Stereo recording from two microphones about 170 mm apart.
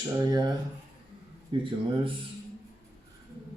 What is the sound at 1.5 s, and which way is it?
Speech, 30° right (ahead or behind).